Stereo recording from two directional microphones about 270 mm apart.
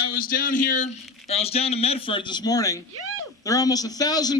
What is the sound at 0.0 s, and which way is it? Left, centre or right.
A man's voice, left.